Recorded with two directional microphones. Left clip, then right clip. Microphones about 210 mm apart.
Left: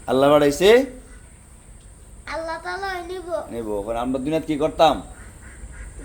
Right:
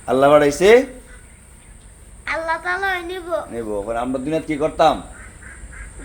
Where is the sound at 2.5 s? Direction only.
Centre (ahead or behind).